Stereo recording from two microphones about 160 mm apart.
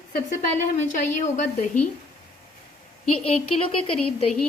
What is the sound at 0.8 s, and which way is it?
Speech, 50° left (ahead or behind).